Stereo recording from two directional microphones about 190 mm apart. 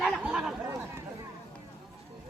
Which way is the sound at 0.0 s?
5° right (ahead or behind).